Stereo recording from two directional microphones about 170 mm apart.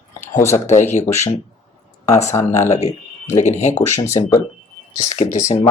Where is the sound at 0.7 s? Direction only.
45° left (ahead or behind).